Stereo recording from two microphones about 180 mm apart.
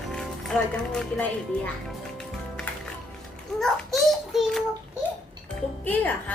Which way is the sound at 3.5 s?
Centre (ahead or behind).